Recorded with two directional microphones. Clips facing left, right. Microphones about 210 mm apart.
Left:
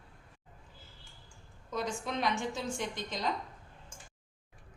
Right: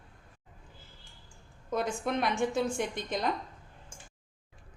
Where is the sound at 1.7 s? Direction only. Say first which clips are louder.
Right 4 dB; 55° right (ahead or behind).